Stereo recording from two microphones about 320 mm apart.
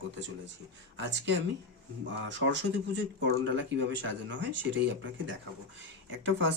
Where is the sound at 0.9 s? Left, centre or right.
Right.